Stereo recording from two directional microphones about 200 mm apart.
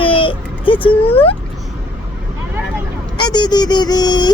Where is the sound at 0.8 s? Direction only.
30° left (ahead or behind).